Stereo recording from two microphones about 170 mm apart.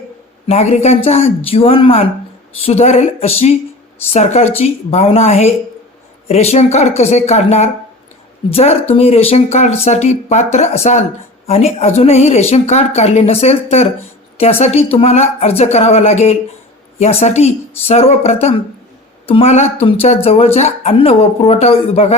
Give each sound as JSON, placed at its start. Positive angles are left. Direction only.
{"t": 0.4, "sound": "a woman's voice", "side_deg": 40}